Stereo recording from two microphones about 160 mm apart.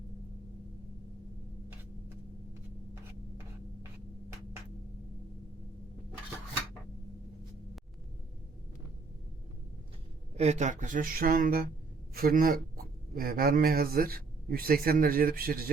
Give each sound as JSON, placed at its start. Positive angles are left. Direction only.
{"t": 10.3, "sound": "speech", "side_deg": -45}